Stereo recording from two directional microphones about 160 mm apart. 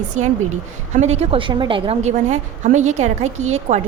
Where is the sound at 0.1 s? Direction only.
50° right (ahead or behind).